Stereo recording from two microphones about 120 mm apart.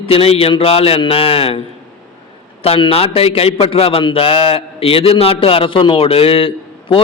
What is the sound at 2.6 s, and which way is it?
A man's voice, 50° left (ahead or behind).